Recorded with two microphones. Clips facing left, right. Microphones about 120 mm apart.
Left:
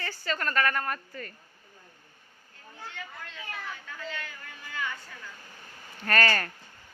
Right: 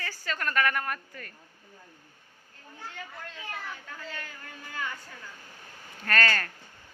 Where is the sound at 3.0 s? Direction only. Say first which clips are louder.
Even; 40° right (ahead or behind).